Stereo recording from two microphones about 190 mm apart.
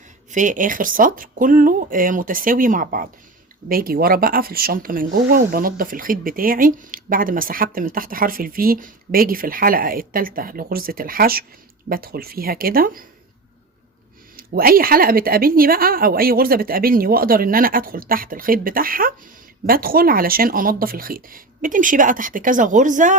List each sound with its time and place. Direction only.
0.3 s speech: 40° right (ahead or behind)
14.3 s speech: 50° right (ahead or behind)